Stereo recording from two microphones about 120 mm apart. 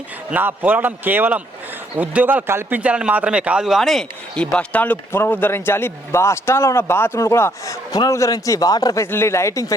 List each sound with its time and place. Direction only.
0.3 s speech: 15° right (ahead or behind); by 4.4 s centre (ahead or behind)
4.5 s a man's voice: 15° left (ahead or behind); by 9.0 s 30° left (ahead or behind)
9.0 s a man's voice: 20° left (ahead or behind)